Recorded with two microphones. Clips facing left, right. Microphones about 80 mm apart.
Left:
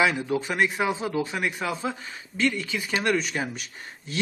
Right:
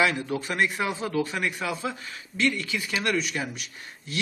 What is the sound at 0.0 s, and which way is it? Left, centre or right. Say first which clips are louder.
A man's voice: left 2 dB; centre.